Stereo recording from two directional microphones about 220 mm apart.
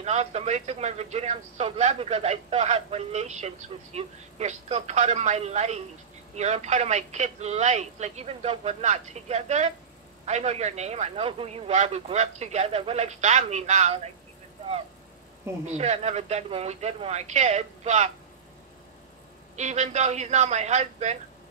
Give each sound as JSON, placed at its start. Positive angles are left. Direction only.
{"t": 0.0, "sound": "speech", "side_deg": -30}
{"t": 15.6, "sound": "speech", "side_deg": -30}
{"t": 19.5, "sound": "speech", "side_deg": -30}